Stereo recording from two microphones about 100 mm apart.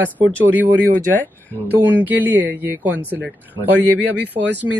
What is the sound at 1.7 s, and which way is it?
Speech, 15° right (ahead or behind).